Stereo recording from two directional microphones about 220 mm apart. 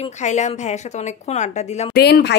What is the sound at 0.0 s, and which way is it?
Speech, 30° left (ahead or behind).